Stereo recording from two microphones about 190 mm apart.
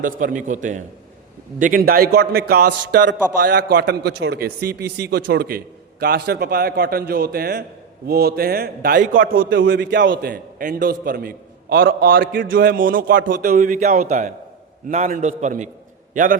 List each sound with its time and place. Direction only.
0.0 s a man's voice: 45° right (ahead or behind)
9.5 s a man's voice: 85° right
10.1 s a man's voice: 50° right (ahead or behind)